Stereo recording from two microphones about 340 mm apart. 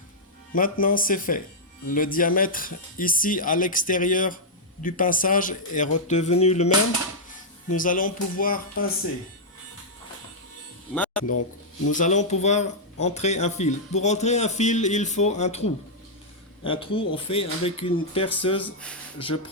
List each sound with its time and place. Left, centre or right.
0.5 s speech: left
7.8 s speech: left
10.9 s music: centre
11.9 s speech: left
16.6 s speech: centre
18.6 s speech: centre